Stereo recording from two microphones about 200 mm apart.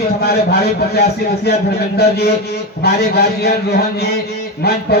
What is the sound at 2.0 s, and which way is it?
Speech, 55° left (ahead or behind).